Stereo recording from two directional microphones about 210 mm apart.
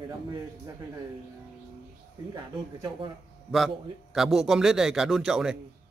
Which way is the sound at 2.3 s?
20° right (ahead or behind).